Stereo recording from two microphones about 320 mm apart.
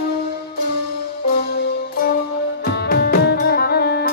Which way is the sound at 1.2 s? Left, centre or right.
Left.